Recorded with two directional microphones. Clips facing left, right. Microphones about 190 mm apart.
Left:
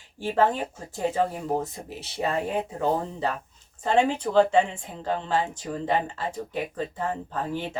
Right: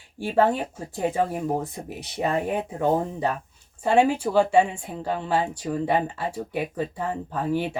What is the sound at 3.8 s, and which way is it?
Speech, 10° right (ahead or behind).